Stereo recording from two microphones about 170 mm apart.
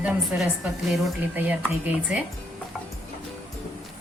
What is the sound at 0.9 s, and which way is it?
Speech, 10° right (ahead or behind).